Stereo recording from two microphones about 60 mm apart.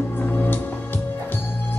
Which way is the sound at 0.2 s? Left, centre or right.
Left.